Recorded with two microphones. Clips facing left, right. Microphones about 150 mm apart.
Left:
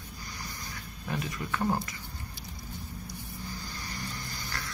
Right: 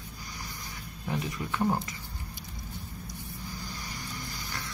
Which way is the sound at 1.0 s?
20° right (ahead or behind).